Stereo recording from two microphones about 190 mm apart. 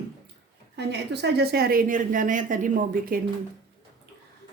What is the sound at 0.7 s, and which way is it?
Speech, 60° right (ahead or behind).